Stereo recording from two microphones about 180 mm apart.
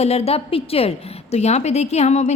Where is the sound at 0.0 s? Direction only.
35° left (ahead or behind).